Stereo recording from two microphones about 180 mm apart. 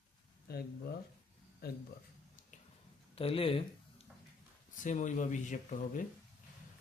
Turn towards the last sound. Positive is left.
turn(degrees=45)  # may be behind; listen again after turning